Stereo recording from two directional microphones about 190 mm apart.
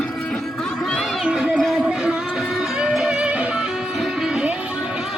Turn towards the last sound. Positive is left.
turn(degrees=-5)  # may be behind; listen again after turning